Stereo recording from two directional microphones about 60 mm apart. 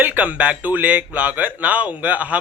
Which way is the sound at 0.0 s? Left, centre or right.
Right.